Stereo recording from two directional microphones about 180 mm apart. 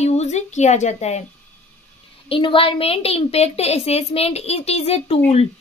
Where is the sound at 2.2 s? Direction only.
30° left (ahead or behind).